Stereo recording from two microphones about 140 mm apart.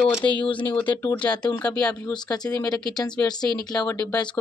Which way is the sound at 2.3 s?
30° left (ahead or behind).